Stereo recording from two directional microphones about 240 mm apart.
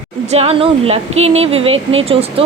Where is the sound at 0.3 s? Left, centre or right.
Right.